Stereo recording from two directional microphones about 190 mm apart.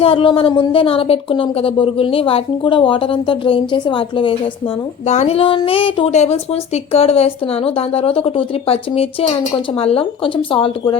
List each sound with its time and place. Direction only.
0.0 s speech: 30° left (ahead or behind)
5.0 s a woman's voice: 35° left (ahead or behind)